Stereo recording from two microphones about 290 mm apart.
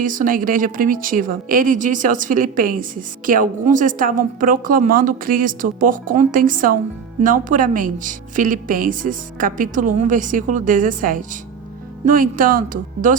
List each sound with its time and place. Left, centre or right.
0.0 s a woman's voice: right